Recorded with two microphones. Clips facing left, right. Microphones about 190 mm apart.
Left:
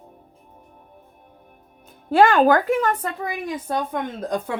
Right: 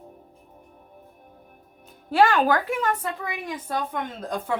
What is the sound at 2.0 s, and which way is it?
Speech, 50° left (ahead or behind).